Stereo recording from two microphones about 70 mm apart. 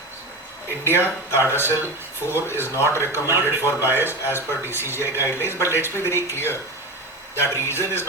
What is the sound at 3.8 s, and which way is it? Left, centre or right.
Speech, right.